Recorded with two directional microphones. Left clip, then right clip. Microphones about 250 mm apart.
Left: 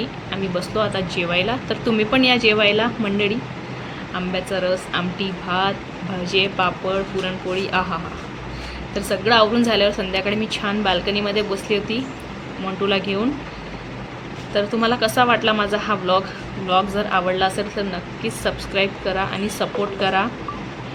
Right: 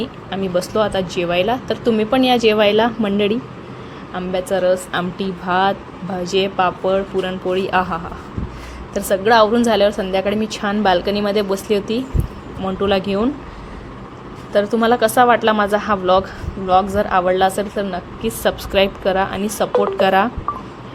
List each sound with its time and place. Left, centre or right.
0.0 s a woman's voice: right
9.0 s a woman's voice: right
14.5 s speech: right